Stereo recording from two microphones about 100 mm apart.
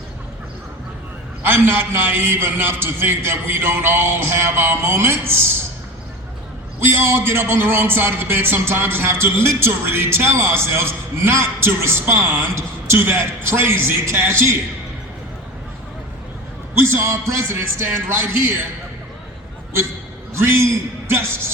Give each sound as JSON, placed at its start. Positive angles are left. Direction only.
{"t": 1.4, "sound": "a man's voice", "side_deg": -20}
{"t": 6.7, "sound": "a man's voice", "side_deg": -25}
{"t": 16.7, "sound": "a man's voice", "side_deg": -25}
{"t": 20.3, "sound": "a man's voice", "side_deg": -25}